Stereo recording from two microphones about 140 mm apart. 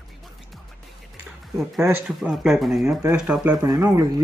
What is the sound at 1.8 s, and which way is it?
Speech, 15° right (ahead or behind).